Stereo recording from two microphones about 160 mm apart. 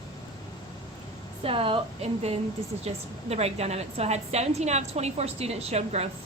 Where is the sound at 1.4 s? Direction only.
35° right (ahead or behind).